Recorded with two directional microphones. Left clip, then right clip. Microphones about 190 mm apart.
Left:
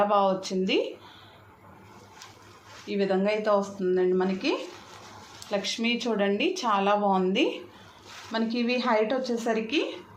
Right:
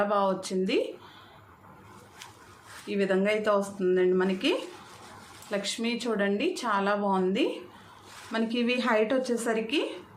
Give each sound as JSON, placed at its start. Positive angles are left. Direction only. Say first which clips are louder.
{"t": 0.0, "sound": "speech", "louder": "left 3 dB", "side_deg": 0}
{"t": 2.8, "sound": "speech", "louder": "even", "side_deg": -15}
{"t": 5.5, "sound": "speech", "louder": "left 3 dB", "side_deg": 0}
{"t": 8.5, "sound": "speech", "louder": "left 1 dB", "side_deg": -15}
{"t": 9.3, "sound": "speech", "louder": "left 1 dB", "side_deg": 0}